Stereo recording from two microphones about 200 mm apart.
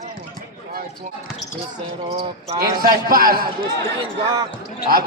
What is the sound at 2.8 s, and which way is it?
Speech, 45° right (ahead or behind).